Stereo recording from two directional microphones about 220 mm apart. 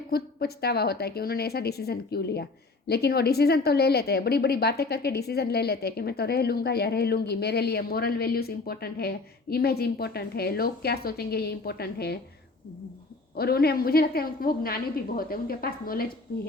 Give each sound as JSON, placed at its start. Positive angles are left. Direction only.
{"t": 0.1, "sound": "a woman's voice", "side_deg": 45}
{"t": 13.3, "sound": "a woman's voice", "side_deg": 45}